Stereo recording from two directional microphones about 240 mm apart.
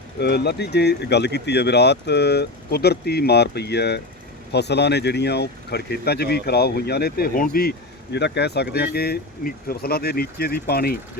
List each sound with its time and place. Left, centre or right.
0.2 s speech: left